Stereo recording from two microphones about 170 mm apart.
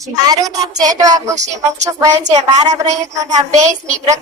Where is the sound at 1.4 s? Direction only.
45° right (ahead or behind).